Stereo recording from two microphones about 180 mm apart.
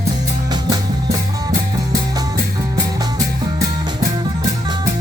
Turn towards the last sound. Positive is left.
turn(degrees=-20)  # may be behind; listen again after turning